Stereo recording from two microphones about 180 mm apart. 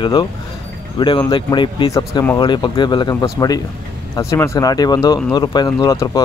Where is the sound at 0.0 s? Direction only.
25° left (ahead or behind).